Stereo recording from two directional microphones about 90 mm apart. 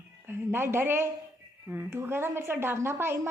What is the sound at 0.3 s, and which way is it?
A woman's voice, 25° right (ahead or behind).